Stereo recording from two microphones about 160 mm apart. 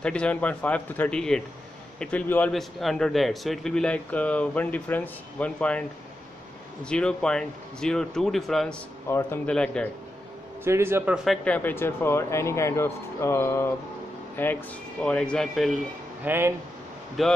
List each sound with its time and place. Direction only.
0.0 s speech: 5° left (ahead or behind)
10.6 s a man's voice: 15° right (ahead or behind)
11.2 s speech: 10° left (ahead or behind)
16.3 s a man's voice: 15° right (ahead or behind)
17.2 s speech: centre (ahead or behind)